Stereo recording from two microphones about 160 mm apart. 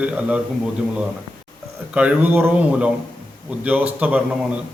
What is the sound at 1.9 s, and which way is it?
A man's voice, 10° right (ahead or behind).